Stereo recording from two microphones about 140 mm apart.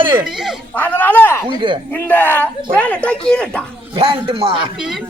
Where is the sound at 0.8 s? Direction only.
10° left (ahead or behind).